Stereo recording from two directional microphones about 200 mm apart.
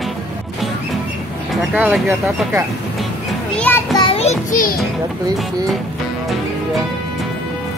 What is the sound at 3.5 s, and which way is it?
Children playing, 5° left (ahead or behind).